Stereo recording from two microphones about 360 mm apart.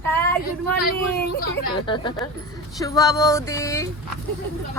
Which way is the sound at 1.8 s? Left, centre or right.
Centre.